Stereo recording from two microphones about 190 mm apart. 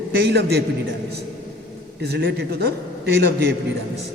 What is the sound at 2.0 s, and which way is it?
A man's voice, 60° right (ahead or behind).